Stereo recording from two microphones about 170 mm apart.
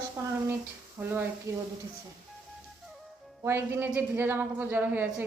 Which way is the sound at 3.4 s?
15° right (ahead or behind).